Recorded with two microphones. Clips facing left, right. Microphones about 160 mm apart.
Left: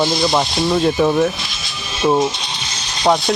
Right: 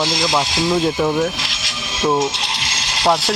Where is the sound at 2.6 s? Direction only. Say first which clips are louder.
Right 2 dB; 90° right.